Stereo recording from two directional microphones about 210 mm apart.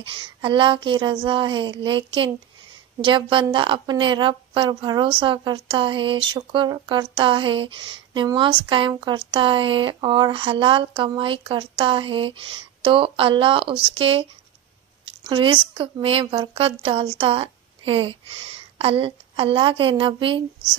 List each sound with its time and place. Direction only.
0.1 s speech: 25° right (ahead or behind)